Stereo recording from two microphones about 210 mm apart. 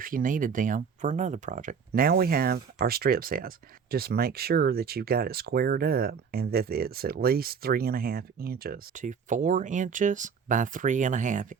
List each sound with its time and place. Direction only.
0.0 s speech: 40° right (ahead or behind)